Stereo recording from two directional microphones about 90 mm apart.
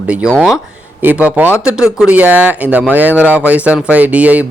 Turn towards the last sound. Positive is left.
turn(degrees=-15)  # may be behind; listen again after turning